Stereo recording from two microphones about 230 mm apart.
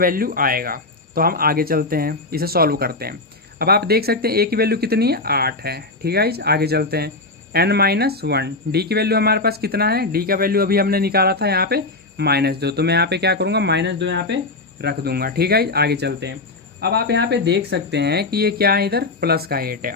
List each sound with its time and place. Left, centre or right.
0.0 s speech: right